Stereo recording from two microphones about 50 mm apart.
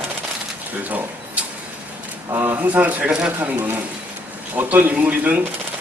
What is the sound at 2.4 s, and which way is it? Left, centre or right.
Speech, right.